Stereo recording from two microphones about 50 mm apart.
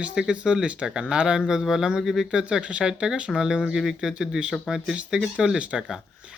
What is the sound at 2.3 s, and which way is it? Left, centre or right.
Speech, right.